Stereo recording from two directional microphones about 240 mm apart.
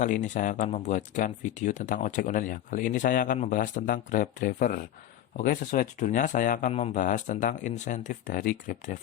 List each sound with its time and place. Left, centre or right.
0.0 s speech: left